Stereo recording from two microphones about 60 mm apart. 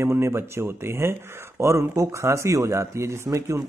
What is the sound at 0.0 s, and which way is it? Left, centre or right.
Speech, right.